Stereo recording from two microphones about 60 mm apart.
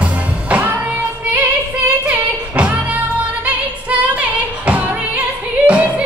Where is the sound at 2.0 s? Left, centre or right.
Right.